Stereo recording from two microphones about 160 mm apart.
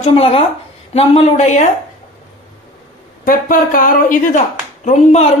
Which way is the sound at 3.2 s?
60° left (ahead or behind).